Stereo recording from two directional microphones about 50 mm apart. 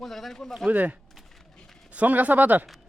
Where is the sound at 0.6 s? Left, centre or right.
Right.